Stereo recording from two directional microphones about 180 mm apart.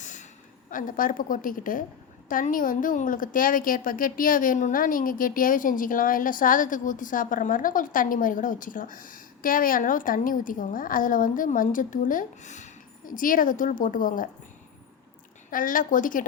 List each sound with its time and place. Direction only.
0.0 s a sound: 40° left (ahead or behind)
0.7 s a woman's voice: 50° left (ahead or behind)
15.4 s a woman's voice: 50° left (ahead or behind)